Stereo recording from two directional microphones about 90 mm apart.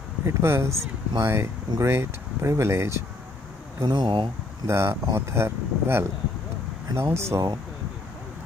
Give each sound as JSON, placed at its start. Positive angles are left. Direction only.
{"t": 0.2, "sound": "speech", "side_deg": -30}
{"t": 3.8, "sound": "speech", "side_deg": -55}
{"t": 4.6, "sound": "speech", "side_deg": -30}